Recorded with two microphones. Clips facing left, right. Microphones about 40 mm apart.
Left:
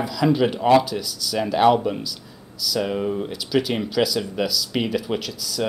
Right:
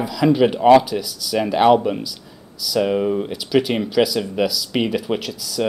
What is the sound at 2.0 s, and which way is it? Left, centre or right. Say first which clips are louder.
Speech: right 2 dB; centre.